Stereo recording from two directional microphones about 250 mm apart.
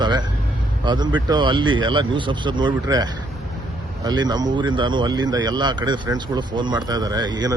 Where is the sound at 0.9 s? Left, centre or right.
Centre.